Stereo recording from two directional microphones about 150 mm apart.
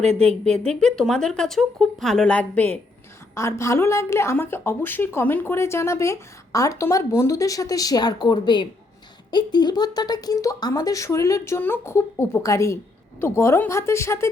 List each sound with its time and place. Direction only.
0.2 s a woman's voice: 5° left (ahead or behind)